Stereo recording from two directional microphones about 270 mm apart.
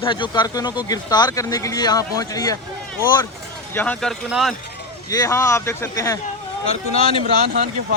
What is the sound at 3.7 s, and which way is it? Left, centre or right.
Speech, centre.